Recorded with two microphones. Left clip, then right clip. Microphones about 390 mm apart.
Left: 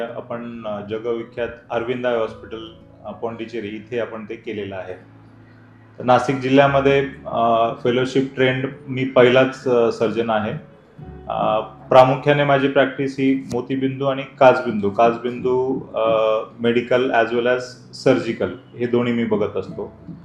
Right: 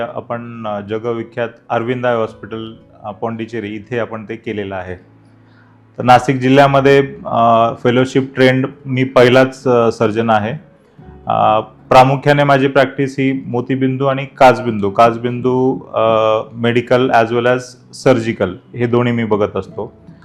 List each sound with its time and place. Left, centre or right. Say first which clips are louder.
0.0 s a man's voice: right 6 dB; right
6.1 s a man's voice: right 6 dB; right